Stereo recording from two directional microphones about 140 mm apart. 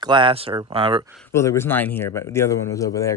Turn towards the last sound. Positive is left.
turn(degrees=25)  # may be behind; listen again after turning